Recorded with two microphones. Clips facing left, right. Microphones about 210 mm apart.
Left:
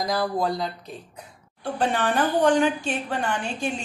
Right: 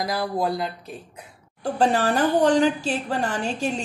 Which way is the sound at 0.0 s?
10° right (ahead or behind).